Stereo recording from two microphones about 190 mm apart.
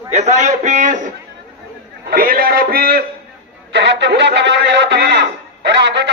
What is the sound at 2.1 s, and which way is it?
Speech, 50° right (ahead or behind).